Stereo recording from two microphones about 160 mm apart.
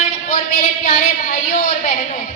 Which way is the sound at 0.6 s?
50° left (ahead or behind).